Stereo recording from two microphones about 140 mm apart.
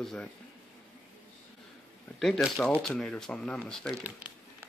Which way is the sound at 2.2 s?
5° left (ahead or behind).